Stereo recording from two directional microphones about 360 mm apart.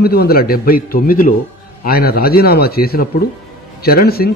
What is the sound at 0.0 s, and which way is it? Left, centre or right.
Speech, left.